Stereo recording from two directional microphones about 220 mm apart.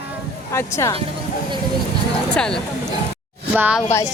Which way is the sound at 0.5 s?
15° left (ahead or behind).